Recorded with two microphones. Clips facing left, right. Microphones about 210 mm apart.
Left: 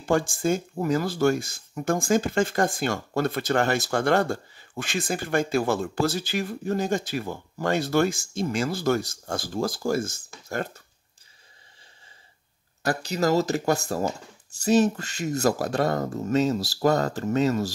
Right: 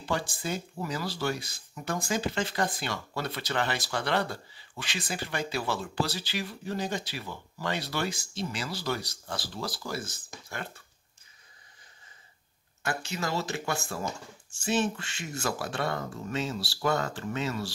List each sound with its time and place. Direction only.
0.0 s speech: 50° left (ahead or behind)
12.8 s speech: 40° left (ahead or behind)